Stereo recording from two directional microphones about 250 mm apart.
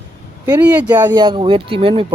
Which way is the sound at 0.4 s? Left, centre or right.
Centre.